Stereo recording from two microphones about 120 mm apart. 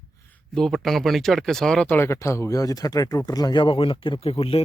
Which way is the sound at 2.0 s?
20° left (ahead or behind).